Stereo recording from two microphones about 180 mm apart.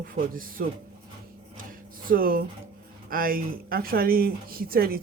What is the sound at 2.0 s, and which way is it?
Speech, 55° right (ahead or behind).